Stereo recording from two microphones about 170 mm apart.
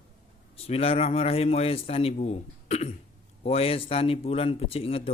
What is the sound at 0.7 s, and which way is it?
Speech, 35° left (ahead or behind).